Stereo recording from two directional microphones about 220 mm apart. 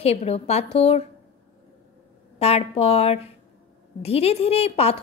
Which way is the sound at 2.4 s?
25° left (ahead or behind).